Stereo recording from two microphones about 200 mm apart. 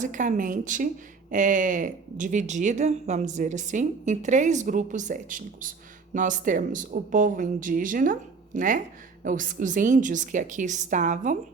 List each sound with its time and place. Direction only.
0.0 s speech: 40° right (ahead or behind)